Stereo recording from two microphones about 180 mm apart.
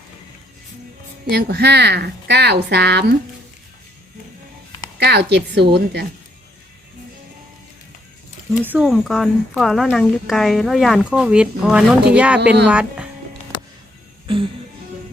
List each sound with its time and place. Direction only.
1.3 s speech: 65° right (ahead or behind)
4.9 s speech: 65° right (ahead or behind)
8.6 s speech: 5° right (ahead or behind)